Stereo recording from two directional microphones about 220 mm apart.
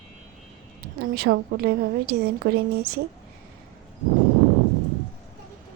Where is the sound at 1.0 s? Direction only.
45° right (ahead or behind).